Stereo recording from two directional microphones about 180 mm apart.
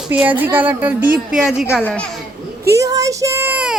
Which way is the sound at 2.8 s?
20° right (ahead or behind).